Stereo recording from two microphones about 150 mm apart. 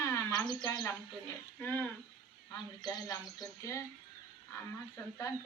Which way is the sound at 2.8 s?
25° left (ahead or behind).